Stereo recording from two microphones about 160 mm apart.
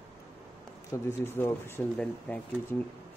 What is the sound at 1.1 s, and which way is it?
Speech, 15° left (ahead or behind).